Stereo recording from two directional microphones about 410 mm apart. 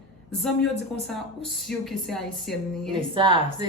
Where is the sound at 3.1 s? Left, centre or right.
Centre.